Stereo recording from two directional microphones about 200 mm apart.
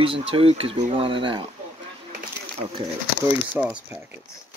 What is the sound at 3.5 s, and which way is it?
Speech, 10° right (ahead or behind).